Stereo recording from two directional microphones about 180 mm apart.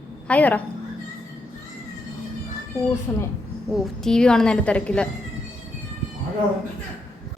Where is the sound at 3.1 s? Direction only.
15° left (ahead or behind).